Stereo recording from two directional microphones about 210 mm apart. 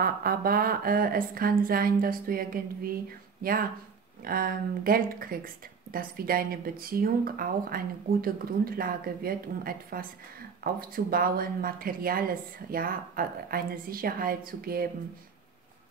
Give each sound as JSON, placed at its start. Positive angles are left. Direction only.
{"t": 0.0, "sound": "speech", "side_deg": -45}